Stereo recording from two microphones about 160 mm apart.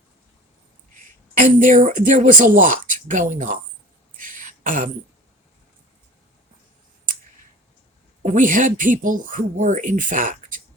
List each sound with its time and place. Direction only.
1.4 s speech: 55° right (ahead or behind)
4.2 s throat clearing: 55° right (ahead or behind)
8.2 s speech: 50° right (ahead or behind)